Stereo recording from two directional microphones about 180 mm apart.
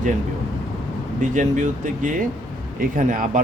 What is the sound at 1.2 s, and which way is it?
Speech, 45° right (ahead or behind).